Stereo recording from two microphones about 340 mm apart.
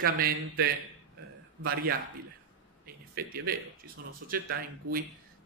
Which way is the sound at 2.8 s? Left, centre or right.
Right.